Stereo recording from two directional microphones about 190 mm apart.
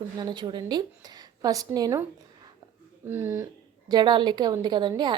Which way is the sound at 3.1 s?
10° right (ahead or behind).